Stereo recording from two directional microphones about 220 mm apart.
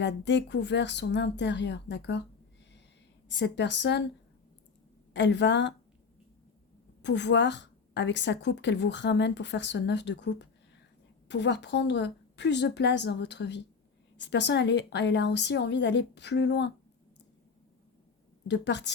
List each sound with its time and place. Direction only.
0.0 s a woman's voice: 55° left (ahead or behind)
3.2 s a woman's voice: 50° left (ahead or behind)
5.1 s a woman's voice: 55° left (ahead or behind)
7.0 s a woman's voice: 55° left (ahead or behind)
18.4 s a woman's voice: 50° left (ahead or behind)